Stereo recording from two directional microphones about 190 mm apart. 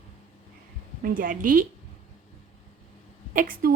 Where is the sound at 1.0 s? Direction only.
45° right (ahead or behind).